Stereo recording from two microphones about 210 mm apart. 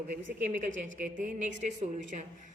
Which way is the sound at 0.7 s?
65° right (ahead or behind).